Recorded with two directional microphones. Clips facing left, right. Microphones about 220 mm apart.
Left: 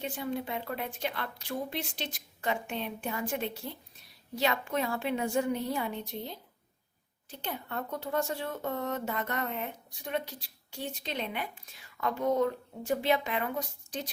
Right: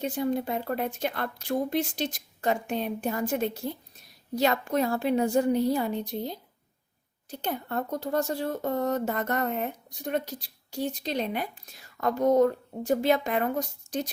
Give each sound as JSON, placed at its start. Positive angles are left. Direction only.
{"t": 0.0, "sound": "a woman's voice", "side_deg": -40}